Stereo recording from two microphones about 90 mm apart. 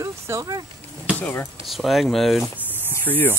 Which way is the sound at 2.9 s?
20° left (ahead or behind).